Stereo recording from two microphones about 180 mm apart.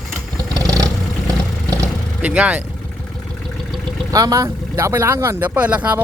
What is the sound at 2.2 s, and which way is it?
Speech, 5° right (ahead or behind).